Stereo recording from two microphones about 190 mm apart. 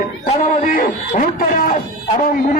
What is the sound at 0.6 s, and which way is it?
Speech, 50° left (ahead or behind).